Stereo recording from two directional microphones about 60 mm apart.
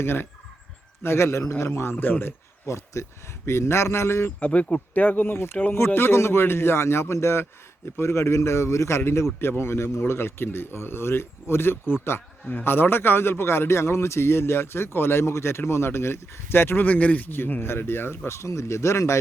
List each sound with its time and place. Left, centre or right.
0.0 s fowl: left
1.0 s speech: left
2.6 s speech: left
4.4 s speech: left